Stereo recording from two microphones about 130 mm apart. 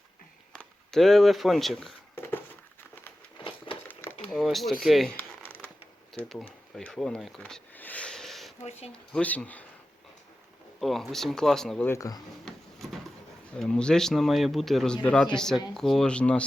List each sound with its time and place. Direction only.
0.5 s speech: 5° left (ahead or behind)
3.8 s a sound: 15° left (ahead or behind)
4.3 s speech: centre (ahead or behind)
6.7 s speech: 5° left (ahead or behind)
8.6 s speech: 55° left (ahead or behind)
8.9 s speech: 10° left (ahead or behind)
10.8 s speech: centre (ahead or behind)
11.9 s speech: 25° left (ahead or behind)
12.5 s printer: centre (ahead or behind)
13.6 s speech: 5° left (ahead or behind)